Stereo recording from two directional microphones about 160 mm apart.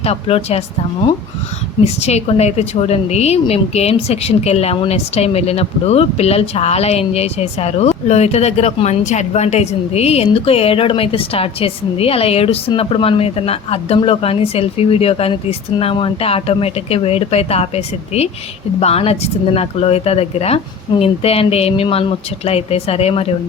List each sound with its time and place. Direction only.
0.0 s a woman's voice: 40° left (ahead or behind)
1.8 s a woman's voice: 40° left (ahead or behind)